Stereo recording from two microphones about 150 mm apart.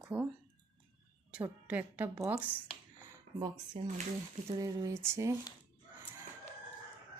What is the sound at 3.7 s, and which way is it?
Speech, 40° right (ahead or behind).